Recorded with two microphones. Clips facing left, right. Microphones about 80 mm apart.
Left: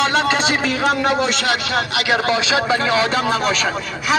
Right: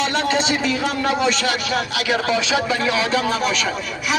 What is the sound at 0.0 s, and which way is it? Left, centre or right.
Speech, left.